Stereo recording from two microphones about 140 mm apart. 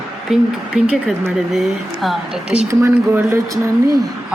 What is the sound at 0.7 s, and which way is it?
A woman's voice, 5° right (ahead or behind).